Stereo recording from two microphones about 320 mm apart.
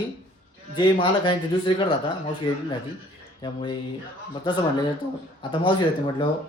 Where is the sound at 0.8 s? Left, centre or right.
Centre.